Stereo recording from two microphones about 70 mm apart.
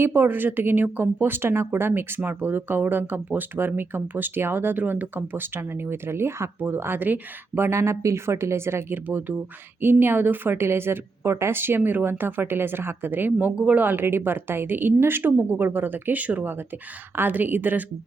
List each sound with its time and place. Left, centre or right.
0.0 s speech: right
7.7 s speech: right
9.0 s a woman's voice: right